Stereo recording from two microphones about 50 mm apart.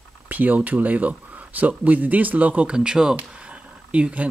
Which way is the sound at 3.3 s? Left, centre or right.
Right.